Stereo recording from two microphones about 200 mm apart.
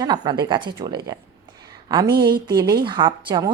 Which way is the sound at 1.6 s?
20° right (ahead or behind).